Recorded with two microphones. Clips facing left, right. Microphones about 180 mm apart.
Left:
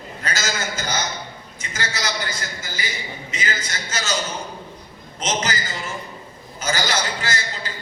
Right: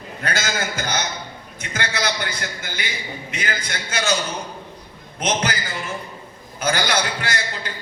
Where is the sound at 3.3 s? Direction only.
60° right (ahead or behind).